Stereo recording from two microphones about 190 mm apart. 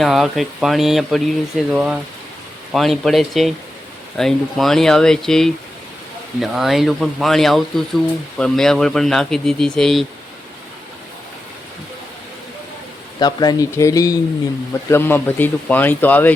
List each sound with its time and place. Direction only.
0.0 s speech: centre (ahead or behind)
13.1 s speech: 20° left (ahead or behind)